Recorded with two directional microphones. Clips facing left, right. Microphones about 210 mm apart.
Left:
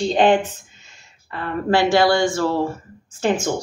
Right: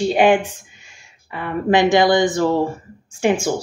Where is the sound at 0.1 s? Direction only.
10° right (ahead or behind).